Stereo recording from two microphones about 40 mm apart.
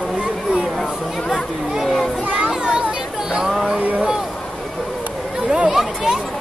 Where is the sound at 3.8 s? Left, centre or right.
Right.